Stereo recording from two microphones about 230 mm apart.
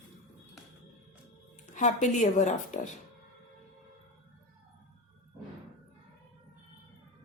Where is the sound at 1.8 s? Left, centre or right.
Left.